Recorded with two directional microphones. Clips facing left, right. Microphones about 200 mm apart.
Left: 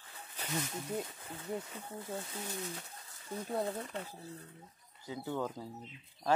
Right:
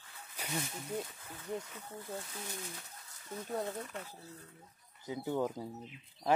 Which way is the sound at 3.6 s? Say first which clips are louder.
Left 2 dB; 30° left (ahead or behind).